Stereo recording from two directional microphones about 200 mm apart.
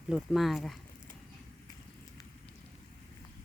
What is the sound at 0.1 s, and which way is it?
Speech, centre (ahead or behind).